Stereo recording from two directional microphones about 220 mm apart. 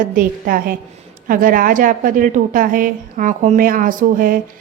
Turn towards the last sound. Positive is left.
turn(degrees=-40)  # may be behind; listen again after turning